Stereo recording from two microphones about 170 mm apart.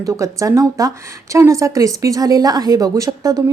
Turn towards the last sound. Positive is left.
turn(degrees=-20)  # may be behind; listen again after turning